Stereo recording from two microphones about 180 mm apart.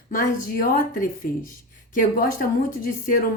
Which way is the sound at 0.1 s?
50° left (ahead or behind).